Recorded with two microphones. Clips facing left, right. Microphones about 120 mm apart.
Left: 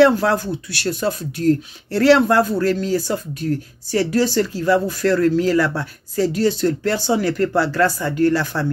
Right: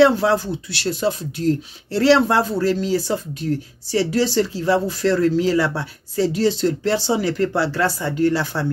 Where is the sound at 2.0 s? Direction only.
25° right (ahead or behind).